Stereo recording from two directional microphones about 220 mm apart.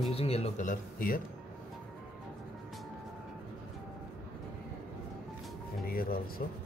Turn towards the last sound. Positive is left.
turn(degrees=40)  # may be behind; listen again after turning